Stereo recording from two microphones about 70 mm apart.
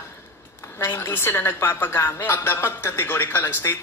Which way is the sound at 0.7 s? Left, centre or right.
Left.